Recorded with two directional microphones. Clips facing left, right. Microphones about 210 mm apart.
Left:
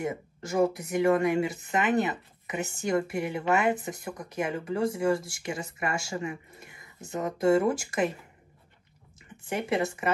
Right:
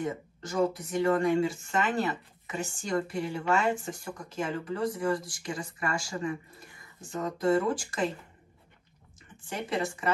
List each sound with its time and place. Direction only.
0.1 s speech: 25° left (ahead or behind)
9.4 s speech: 20° left (ahead or behind)